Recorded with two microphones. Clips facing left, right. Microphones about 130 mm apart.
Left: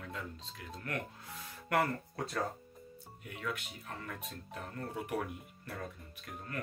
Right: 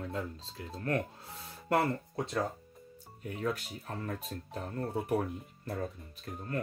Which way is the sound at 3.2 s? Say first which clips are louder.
Right 6 dB; 35° right (ahead or behind).